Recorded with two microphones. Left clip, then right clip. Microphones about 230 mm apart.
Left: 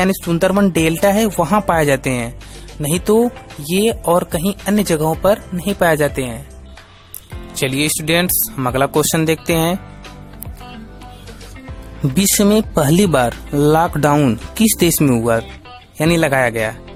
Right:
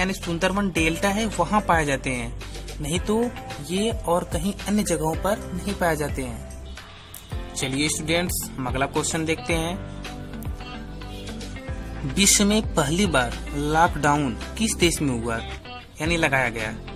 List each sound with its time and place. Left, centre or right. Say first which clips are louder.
0.0 s speech: left 8 dB; left
3.7 s speech: left 9 dB; left
7.6 s speech: left 7 dB; left
12.1 s speech: left 5 dB; left